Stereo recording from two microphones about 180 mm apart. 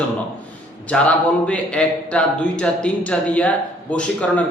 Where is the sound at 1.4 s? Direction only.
5° left (ahead or behind).